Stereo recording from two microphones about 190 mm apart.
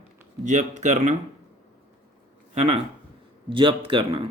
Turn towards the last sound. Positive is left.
turn(degrees=-25)  # may be behind; listen again after turning